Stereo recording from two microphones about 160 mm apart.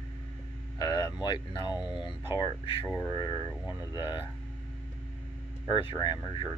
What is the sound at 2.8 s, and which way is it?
Speech, 10° left (ahead or behind).